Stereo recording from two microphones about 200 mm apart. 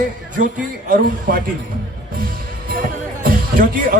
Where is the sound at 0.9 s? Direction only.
45° right (ahead or behind).